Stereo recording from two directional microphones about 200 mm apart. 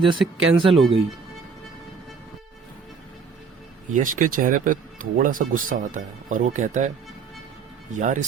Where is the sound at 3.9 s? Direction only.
40° right (ahead or behind).